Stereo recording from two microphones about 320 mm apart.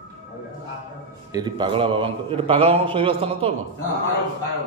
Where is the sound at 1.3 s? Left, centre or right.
Centre.